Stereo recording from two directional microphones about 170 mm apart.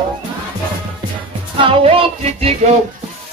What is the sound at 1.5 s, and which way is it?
Speech, 30° right (ahead or behind).